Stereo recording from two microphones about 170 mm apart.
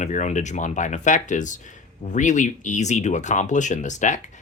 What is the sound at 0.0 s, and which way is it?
Speech, 45° left (ahead or behind).